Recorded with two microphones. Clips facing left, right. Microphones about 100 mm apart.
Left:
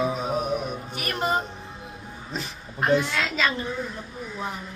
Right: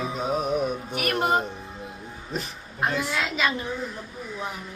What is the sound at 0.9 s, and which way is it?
Speech, 60° right (ahead or behind).